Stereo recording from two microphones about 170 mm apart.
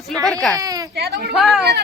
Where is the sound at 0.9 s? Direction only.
70° right (ahead or behind).